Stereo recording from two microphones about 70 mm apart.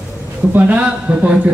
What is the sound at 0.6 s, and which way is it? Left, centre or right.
Speech, centre.